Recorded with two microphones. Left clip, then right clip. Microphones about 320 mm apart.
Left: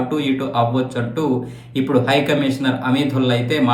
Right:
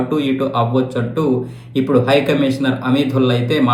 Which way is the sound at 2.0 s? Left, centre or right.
Left.